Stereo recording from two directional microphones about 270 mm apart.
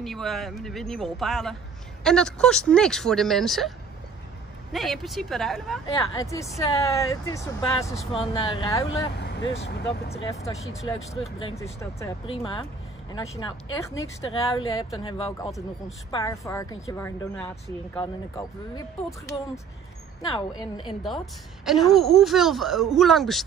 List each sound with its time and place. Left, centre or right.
0.0 s speech: centre
4.7 s a woman's voice: centre
9.1 s vehicle: left
9.6 s speech: left
10.0 s speech: left
10.4 s a woman's voice: centre
11.4 s a woman's voice: centre
20.2 s a woman's voice: centre
21.6 s speech: centre